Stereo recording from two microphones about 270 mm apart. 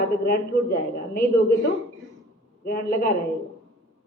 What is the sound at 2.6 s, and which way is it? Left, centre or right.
Speech, left.